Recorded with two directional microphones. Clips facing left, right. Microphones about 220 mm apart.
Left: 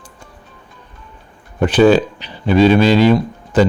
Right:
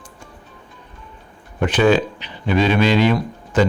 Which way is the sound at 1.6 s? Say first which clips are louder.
Left 5 dB; 35° left (ahead or behind).